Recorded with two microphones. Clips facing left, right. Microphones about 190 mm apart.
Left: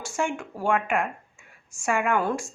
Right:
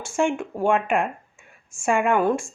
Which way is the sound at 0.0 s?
25° right (ahead or behind).